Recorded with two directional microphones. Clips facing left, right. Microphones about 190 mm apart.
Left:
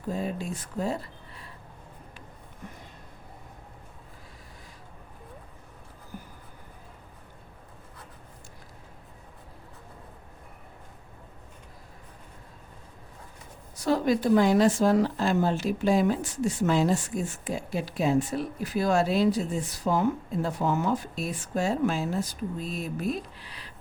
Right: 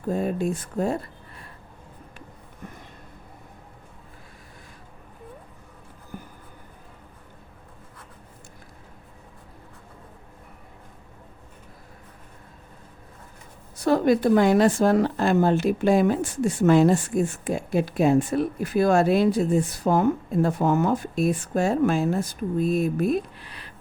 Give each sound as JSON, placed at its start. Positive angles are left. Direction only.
{"t": 0.1, "sound": "speech", "side_deg": -50}
{"t": 6.1, "sound": "a sound", "side_deg": -50}
{"t": 13.7, "sound": "a woman's voice", "side_deg": -55}